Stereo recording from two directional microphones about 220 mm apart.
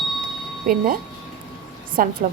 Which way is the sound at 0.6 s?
40° right (ahead or behind).